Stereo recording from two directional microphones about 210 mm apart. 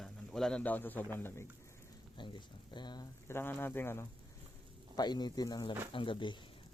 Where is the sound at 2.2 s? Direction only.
20° left (ahead or behind).